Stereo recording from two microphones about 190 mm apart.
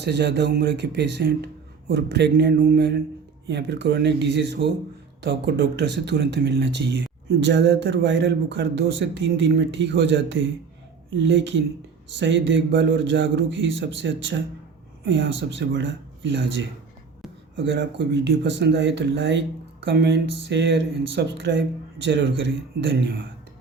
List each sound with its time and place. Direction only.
0.0 s speech: 60° right (ahead or behind)